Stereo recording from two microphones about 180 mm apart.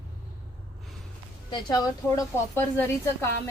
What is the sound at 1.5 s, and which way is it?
Speech, 25° left (ahead or behind).